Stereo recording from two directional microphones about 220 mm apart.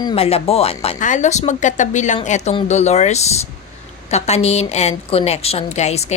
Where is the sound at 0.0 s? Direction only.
25° left (ahead or behind).